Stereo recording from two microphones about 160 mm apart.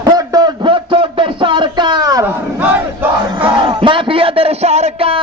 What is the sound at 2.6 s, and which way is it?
Crowd, 10° right (ahead or behind).